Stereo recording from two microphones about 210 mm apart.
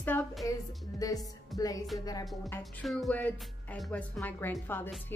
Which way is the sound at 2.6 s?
Centre (ahead or behind).